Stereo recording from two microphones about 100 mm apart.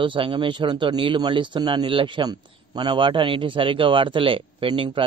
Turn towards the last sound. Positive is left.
turn(degrees=-60)  # may be behind; listen again after turning